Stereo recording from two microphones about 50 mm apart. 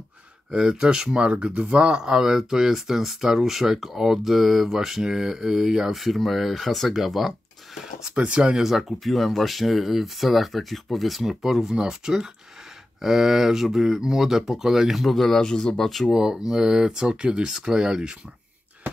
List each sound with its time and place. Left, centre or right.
0.5 s speech: centre
8.1 s speech: right; by 15.9 s centre
16.1 s speech: centre